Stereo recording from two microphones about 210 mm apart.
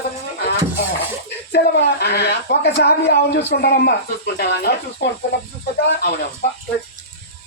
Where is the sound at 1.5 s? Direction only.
55° left (ahead or behind).